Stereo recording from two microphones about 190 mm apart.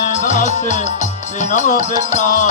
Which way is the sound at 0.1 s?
40° left (ahead or behind).